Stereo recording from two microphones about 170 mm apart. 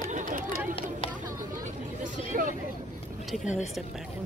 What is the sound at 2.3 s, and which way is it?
Hubbub, 50° right (ahead or behind).